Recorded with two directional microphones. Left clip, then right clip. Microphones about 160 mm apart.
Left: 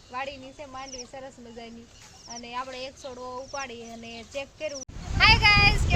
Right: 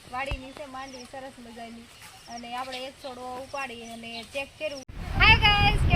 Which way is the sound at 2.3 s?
25° left (ahead or behind).